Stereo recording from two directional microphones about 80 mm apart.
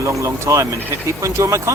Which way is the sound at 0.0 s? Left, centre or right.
Right.